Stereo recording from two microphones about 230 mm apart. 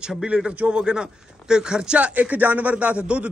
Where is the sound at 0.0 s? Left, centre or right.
Centre.